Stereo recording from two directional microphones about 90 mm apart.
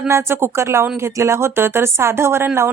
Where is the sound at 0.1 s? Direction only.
30° right (ahead or behind).